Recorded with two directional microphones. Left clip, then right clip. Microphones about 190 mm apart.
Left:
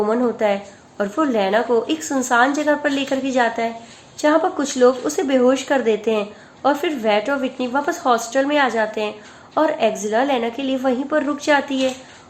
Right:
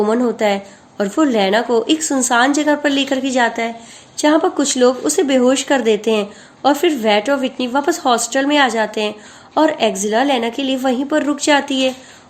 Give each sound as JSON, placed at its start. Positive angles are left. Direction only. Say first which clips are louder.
{"t": 0.0, "sound": "speech", "louder": "right 3 dB", "side_deg": -40}